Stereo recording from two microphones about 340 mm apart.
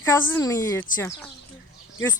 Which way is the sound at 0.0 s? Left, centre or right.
Centre.